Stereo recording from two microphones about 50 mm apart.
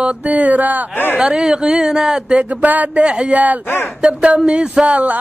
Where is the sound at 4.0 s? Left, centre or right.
Right.